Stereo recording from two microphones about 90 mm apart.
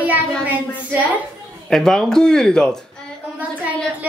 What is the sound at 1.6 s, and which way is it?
Speech, 5° left (ahead or behind).